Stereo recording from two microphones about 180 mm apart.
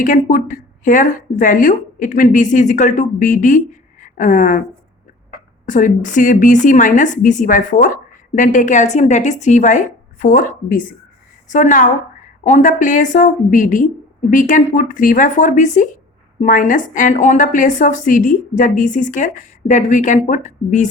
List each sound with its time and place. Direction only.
0.0 s speech: 45° left (ahead or behind)
5.6 s speech: 45° left (ahead or behind)